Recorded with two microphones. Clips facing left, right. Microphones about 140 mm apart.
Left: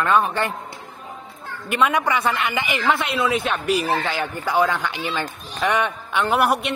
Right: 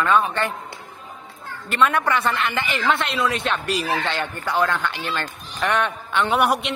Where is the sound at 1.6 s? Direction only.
10° left (ahead or behind).